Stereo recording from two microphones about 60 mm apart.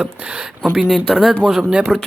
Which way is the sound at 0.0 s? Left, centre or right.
Right.